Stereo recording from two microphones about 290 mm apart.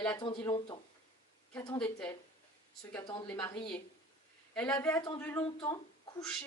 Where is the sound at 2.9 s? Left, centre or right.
Centre.